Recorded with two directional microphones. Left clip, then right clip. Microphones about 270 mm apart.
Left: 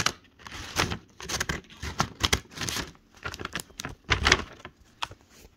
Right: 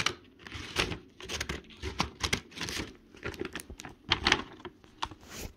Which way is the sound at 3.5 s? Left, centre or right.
Left.